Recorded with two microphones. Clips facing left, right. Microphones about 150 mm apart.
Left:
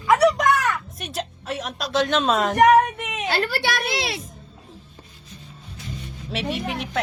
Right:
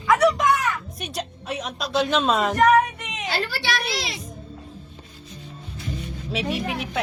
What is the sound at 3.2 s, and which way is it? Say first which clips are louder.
A child's voice: left 3 dB; 60° left (ahead or behind).